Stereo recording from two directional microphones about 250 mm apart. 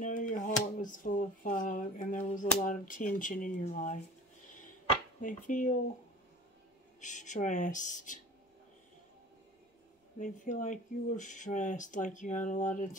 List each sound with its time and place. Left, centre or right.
0.0 s a sound: left
5.2 s speech: left
7.0 s speech: left
10.1 s speech: left